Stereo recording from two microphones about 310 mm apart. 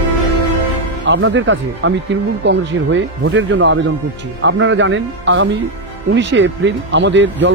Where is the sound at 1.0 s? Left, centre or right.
Right.